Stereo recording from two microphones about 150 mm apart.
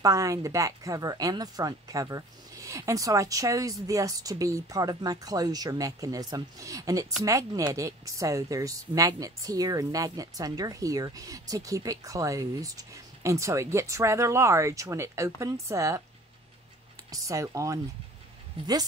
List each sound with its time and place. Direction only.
0.0 s speech: 25° right (ahead or behind)
17.1 s speech: 20° right (ahead or behind)